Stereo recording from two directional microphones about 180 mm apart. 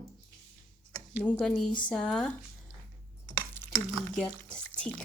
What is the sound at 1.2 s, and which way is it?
Speech, 5° left (ahead or behind).